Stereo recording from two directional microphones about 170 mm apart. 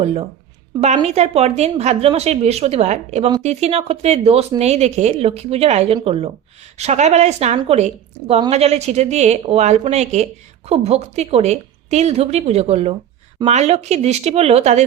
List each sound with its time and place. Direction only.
0.0 s speech: 35° right (ahead or behind)